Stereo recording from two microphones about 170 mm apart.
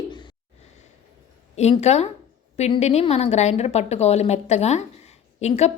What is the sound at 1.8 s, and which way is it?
A woman's voice, 40° left (ahead or behind).